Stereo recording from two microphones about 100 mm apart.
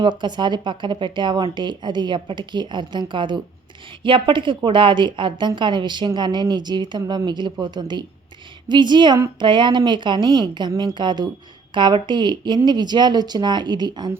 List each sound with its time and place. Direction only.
0.0 s speech: 50° right (ahead or behind)